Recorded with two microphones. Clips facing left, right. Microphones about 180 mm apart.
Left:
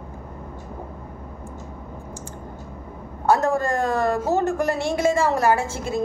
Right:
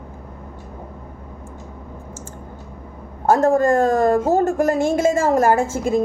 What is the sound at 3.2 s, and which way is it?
A woman's voice, 50° right (ahead or behind).